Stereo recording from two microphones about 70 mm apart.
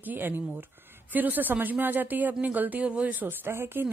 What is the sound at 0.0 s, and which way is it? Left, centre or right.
Speech, right.